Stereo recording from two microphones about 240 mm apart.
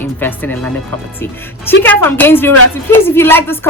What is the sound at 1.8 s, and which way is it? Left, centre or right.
A woman's voice, centre.